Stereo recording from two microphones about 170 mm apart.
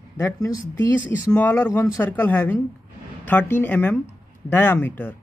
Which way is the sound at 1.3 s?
10° left (ahead or behind).